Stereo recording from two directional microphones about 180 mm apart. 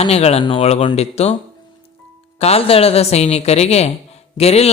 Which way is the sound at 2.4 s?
35° left (ahead or behind).